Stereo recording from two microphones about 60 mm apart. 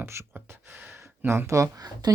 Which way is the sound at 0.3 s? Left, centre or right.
Right.